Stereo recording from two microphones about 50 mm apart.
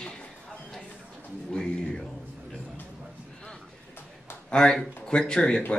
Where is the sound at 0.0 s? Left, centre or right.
Centre.